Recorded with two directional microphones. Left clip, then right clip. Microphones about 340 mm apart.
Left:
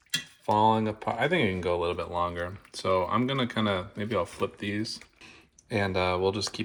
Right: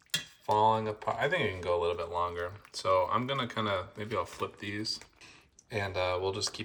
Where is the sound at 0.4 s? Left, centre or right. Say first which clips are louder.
Left 3 dB; centre.